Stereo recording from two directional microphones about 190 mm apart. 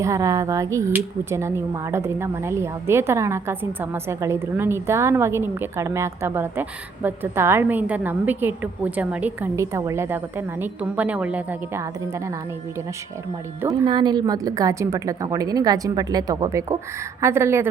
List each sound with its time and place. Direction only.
0.0 s speech: 15° right (ahead or behind)
13.8 s a woman's voice: 25° right (ahead or behind)